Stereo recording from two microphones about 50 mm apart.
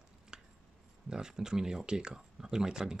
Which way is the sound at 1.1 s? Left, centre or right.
Centre.